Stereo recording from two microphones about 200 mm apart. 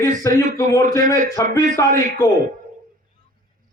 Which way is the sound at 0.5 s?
15° left (ahead or behind).